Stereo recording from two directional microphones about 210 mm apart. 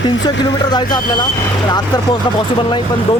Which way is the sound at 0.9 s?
20° left (ahead or behind).